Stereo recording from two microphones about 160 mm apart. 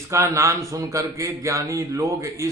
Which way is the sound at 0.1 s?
20° right (ahead or behind).